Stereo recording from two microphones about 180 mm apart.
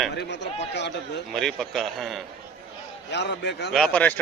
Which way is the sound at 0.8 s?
70° left (ahead or behind).